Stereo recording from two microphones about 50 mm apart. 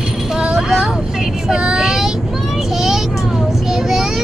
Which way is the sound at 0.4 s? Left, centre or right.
Centre.